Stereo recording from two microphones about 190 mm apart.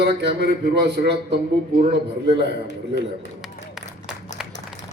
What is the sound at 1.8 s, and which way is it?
Speech, 30° right (ahead or behind).